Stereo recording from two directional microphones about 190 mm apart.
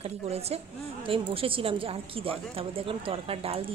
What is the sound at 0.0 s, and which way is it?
A woman's voice, 35° right (ahead or behind).